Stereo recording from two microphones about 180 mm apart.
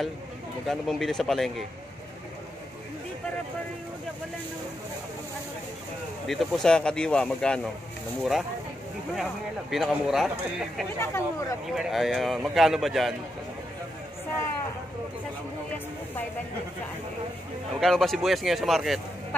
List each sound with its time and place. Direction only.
0.7 s speech: centre (ahead or behind)
6.2 s speech: centre (ahead or behind)
11.0 s speech: 15° left (ahead or behind)
11.7 s speech: centre (ahead or behind)
17.7 s speech: centre (ahead or behind)